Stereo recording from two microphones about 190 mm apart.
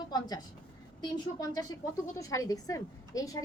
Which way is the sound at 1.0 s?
20° left (ahead or behind).